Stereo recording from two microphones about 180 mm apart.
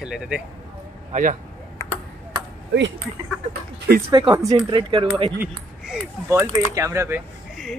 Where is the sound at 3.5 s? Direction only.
60° right (ahead or behind).